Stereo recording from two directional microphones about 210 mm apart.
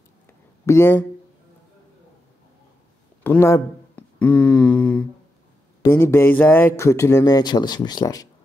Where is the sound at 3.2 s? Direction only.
10° left (ahead or behind).